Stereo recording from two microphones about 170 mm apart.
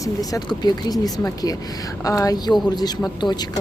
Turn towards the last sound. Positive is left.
turn(degrees=25)  # may be behind; listen again after turning